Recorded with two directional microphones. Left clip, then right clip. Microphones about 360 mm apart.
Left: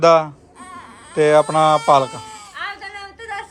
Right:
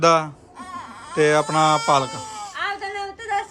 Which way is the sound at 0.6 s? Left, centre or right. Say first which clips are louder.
Right 3 dB; centre.